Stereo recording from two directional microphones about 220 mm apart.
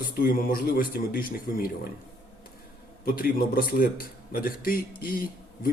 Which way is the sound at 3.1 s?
40° left (ahead or behind).